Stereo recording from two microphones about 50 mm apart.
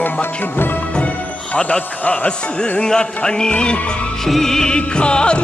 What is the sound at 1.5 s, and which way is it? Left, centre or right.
A man's voice, left.